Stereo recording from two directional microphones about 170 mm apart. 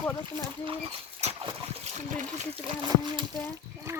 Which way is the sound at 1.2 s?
40° right (ahead or behind).